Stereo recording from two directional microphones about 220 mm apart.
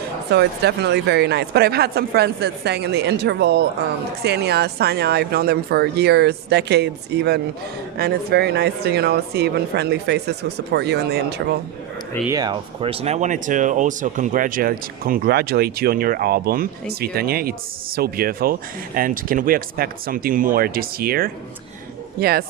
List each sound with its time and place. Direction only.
0.3 s speech: 45° right (ahead or behind)
12.3 s speech: 20° right (ahead or behind); by 22.4 s 45° right (ahead or behind)